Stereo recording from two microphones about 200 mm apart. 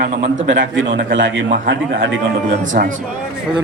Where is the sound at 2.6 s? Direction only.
40° right (ahead or behind).